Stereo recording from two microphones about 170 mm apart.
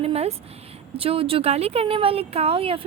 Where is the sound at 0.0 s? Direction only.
35° right (ahead or behind).